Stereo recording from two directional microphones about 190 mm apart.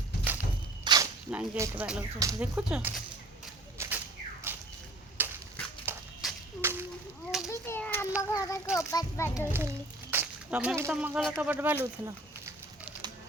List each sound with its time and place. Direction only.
0.9 s a sound: 25° right (ahead or behind)
1.3 s speech: 10° right (ahead or behind)
3.8 s a sound: 10° right (ahead or behind)
7.4 s children playing: 15° left (ahead or behind)
8.2 s a child's voice: 15° left (ahead or behind)
9.5 s speech: 10° right (ahead or behind)
11.2 s speech: centre (ahead or behind)
11.4 s speech: 10° right (ahead or behind)